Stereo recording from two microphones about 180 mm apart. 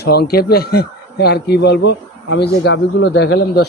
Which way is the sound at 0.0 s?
60° left (ahead or behind).